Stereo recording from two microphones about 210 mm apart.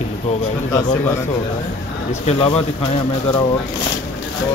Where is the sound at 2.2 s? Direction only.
25° left (ahead or behind).